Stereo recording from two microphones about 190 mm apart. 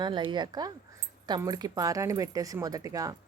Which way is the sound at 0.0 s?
25° right (ahead or behind).